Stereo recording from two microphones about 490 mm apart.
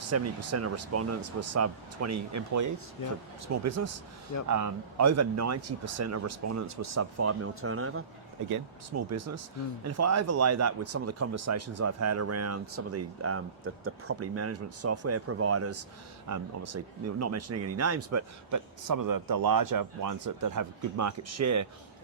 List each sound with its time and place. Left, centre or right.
0.1 s speech: right